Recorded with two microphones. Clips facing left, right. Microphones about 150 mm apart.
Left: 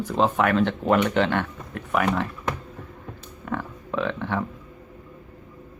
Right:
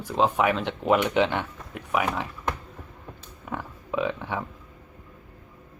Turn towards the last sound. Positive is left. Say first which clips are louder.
# left 2 dB
turn(degrees=-10)  # may be behind; listen again after turning